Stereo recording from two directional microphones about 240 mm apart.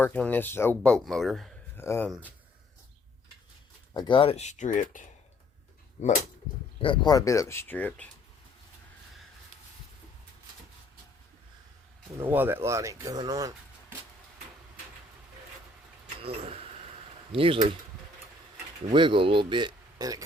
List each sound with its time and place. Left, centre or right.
0.0 s speech: centre
3.9 s speech: centre
6.8 s speech: centre
12.1 s speech: centre
16.2 s speech: right
18.9 s speech: right